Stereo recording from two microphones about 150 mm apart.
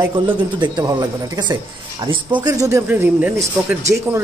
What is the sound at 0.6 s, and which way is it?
Speech, 30° right (ahead or behind).